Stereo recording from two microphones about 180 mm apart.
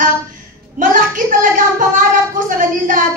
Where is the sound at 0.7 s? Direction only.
45° right (ahead or behind).